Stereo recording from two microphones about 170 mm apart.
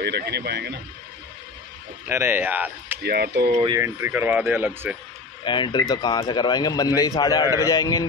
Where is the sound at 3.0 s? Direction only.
70° right (ahead or behind).